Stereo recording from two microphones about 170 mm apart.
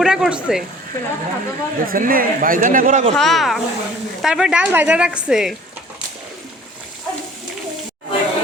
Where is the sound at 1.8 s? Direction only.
55° right (ahead or behind).